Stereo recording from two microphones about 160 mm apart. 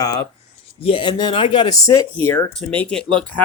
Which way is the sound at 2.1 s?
10° left (ahead or behind).